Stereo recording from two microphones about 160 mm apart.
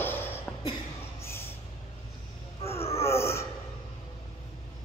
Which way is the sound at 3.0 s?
15° left (ahead or behind).